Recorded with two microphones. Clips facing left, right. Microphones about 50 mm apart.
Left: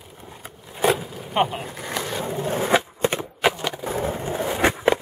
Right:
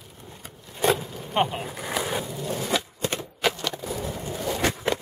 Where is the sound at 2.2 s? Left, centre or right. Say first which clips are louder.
Left 6 dB; left; by 3.9 s centre.